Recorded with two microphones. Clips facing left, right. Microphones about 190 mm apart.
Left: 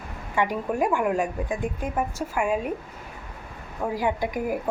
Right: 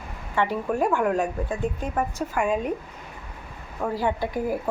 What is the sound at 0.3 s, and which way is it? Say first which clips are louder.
Speech: even; 15° left (ahead or behind).